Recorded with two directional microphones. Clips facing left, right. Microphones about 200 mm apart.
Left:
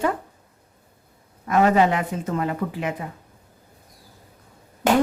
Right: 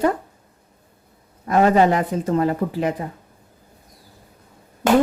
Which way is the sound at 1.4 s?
35° right (ahead or behind).